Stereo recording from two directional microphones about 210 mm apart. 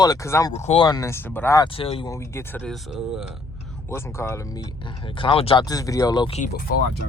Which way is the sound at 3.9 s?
10° left (ahead or behind).